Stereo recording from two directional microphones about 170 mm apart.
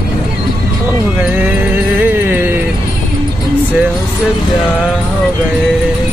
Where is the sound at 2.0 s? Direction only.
10° right (ahead or behind).